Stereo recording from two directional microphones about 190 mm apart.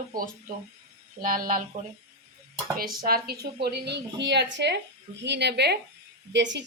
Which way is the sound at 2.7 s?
50° right (ahead or behind).